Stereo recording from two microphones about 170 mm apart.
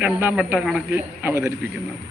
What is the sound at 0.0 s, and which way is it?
Speech, 10° right (ahead or behind).